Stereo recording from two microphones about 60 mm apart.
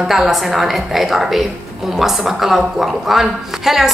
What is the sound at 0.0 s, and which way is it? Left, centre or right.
A woman's voice, centre.